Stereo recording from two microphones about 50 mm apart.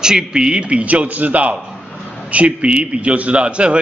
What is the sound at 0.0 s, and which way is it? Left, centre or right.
A man's voice, centre.